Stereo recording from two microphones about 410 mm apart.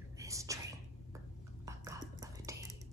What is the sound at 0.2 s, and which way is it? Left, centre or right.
Whispering, centre.